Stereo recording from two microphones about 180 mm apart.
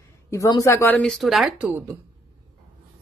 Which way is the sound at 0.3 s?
20° left (ahead or behind).